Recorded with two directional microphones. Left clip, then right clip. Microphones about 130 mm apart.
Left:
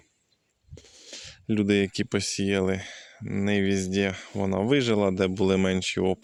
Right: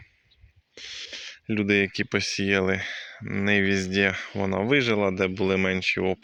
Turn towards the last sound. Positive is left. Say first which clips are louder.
# right 1 dB
turn(degrees=55)  # may be behind; listen again after turning